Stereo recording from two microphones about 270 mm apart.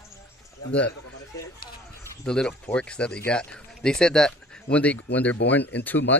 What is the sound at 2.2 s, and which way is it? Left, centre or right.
Speech, centre.